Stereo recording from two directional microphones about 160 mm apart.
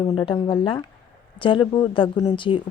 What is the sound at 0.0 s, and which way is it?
A woman's voice, 30° left (ahead or behind).